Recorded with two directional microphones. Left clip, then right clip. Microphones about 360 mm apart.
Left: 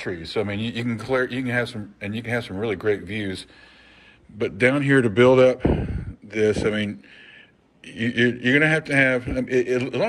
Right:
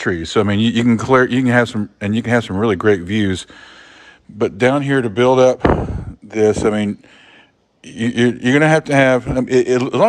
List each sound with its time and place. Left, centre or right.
0.0 s speech: right
4.6 s a man's voice: centre